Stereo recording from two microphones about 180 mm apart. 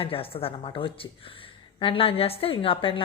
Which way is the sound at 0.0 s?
30° left (ahead or behind).